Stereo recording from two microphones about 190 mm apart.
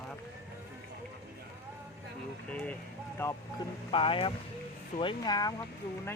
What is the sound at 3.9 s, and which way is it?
Speech, 30° left (ahead or behind).